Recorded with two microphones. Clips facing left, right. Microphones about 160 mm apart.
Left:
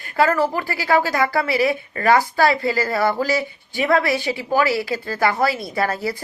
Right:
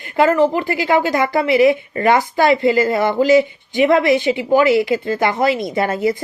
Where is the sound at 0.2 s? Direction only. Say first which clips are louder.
Right 5 dB; 20° right (ahead or behind).